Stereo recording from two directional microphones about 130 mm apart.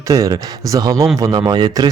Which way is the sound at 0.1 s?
25° right (ahead or behind).